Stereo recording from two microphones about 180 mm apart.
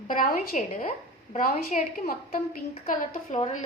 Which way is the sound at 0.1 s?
50° left (ahead or behind).